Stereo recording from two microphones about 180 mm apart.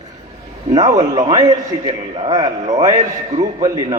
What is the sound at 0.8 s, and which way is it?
A man's voice, 20° right (ahead or behind).